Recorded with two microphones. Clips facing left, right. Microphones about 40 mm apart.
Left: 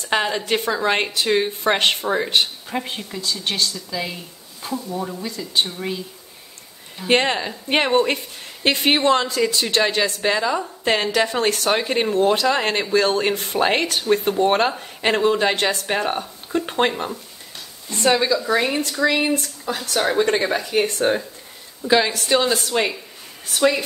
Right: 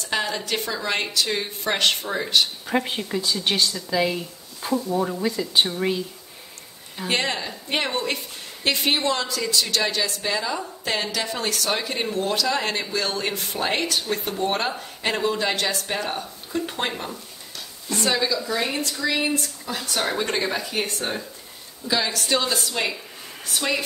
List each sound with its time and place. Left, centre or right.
0.0 s a woman's voice: left
2.6 s speech: centre
7.1 s speech: left
16.9 s speech: centre
18.0 s speech: left
20.0 s speech: centre
21.0 s speech: left
22.2 s speech: centre
23.6 s speech: centre